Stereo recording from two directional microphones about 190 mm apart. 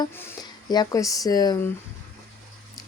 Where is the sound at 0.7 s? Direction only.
20° left (ahead or behind).